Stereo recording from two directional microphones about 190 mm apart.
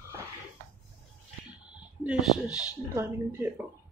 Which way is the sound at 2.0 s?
5° right (ahead or behind).